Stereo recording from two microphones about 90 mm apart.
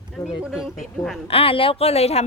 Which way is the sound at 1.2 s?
90° left.